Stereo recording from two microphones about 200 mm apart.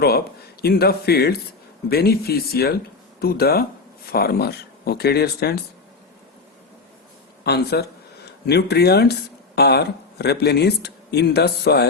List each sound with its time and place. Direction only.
0.6 s speech: 50° left (ahead or behind)
7.4 s speech: 55° left (ahead or behind)